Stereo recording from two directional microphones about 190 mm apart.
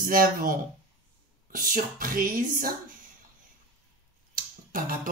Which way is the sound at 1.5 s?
45° right (ahead or behind).